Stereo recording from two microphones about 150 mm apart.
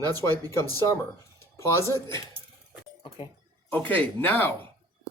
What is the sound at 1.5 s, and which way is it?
Speech, 20° left (ahead or behind).